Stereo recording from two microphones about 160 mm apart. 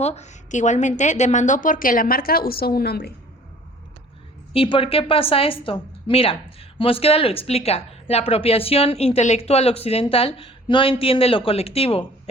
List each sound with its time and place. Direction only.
0.0 s a woman's voice: 45° left (ahead or behind); by 3.1 s 80° left
4.5 s a woman's voice: 35° left (ahead or behind)